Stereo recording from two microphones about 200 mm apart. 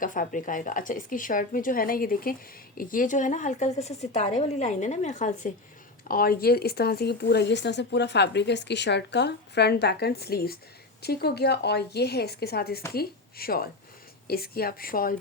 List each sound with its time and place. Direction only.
0.0 s a woman's voice: 40° left (ahead or behind)